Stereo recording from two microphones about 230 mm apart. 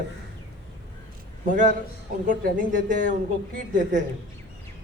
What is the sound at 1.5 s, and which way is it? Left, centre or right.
A man's voice, right.